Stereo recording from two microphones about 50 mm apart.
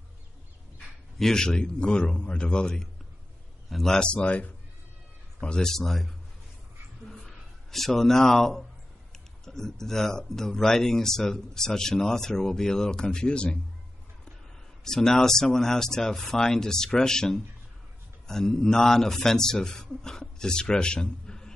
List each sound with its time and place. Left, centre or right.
1.1 s speech: centre
4.0 s speech: left
5.7 s a man's voice: centre
7.1 s a sound: centre
9.1 s speech: centre
14.9 s speech: centre